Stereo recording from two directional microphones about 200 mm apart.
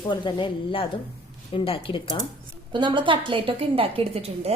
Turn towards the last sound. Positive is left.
turn(degrees=-30)  # may be behind; listen again after turning